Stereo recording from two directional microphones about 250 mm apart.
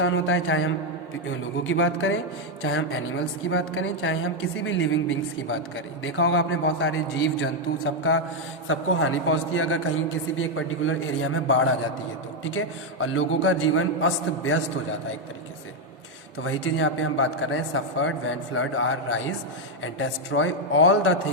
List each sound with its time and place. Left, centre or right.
0.0 s a man's voice: left
8.6 s a man's voice: left
16.4 s a man's voice: left